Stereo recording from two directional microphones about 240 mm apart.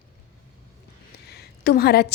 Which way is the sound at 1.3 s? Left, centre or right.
Left.